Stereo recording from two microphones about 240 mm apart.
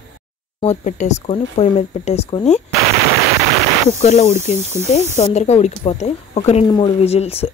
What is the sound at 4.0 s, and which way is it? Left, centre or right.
Speech, left.